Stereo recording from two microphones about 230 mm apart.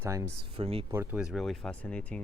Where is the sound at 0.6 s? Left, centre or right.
Right.